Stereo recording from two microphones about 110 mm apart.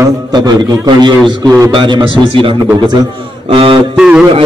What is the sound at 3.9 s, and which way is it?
Music, 10° right (ahead or behind).